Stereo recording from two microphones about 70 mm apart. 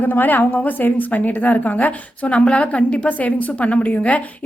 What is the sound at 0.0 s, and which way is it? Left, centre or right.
A woman's voice, left.